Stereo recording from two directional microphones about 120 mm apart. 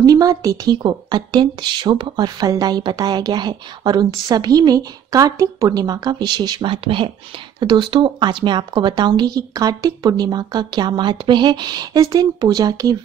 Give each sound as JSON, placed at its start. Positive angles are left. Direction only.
{"t": 0.0, "sound": "a woman's voice", "side_deg": -30}